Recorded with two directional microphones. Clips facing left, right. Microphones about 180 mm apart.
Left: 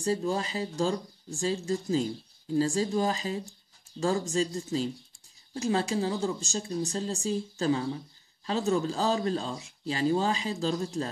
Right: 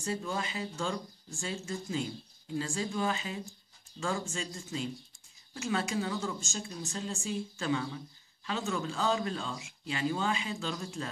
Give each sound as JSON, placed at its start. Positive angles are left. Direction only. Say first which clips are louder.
{"t": 0.0, "sound": "speech", "louder": "left 6 dB", "side_deg": 35}